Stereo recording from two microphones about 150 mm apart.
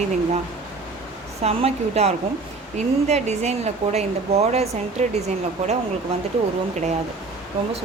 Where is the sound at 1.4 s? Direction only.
45° right (ahead or behind).